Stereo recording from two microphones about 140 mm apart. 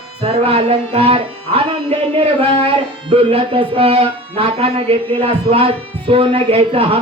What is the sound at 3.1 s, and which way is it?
Speech, 40° right (ahead or behind).